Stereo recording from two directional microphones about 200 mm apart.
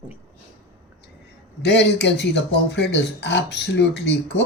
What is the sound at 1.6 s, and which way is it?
Speech, 60° left (ahead or behind).